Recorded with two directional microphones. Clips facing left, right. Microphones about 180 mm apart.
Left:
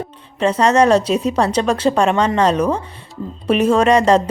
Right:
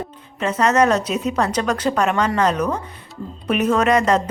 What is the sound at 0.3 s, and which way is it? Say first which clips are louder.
Speech: left 3 dB; 30° left (ahead or behind).